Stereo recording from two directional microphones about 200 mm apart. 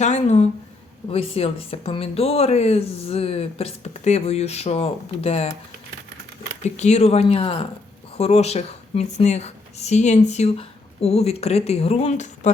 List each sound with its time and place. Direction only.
0.0 s speech: 35° left (ahead or behind)
6.7 s speech: 35° left (ahead or behind)